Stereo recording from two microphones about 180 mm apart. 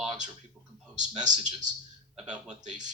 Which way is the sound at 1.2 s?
40° right (ahead or behind).